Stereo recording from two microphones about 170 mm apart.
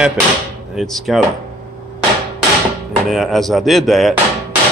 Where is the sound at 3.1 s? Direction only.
Centre (ahead or behind).